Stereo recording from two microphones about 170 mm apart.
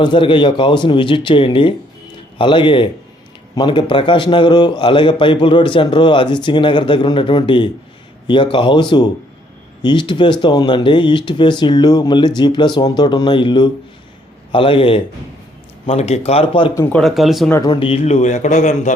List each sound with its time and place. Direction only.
0.0 s a man's voice: 30° left (ahead or behind)
16.7 s speech: 10° left (ahead or behind)
17.0 s speech: centre (ahead or behind)
17.5 s a man's voice: 20° left (ahead or behind)
17.7 s a man's voice: 35° left (ahead or behind)